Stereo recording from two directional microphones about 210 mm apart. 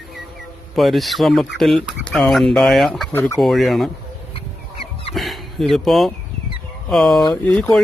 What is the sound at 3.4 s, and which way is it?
Speech, centre (ahead or behind).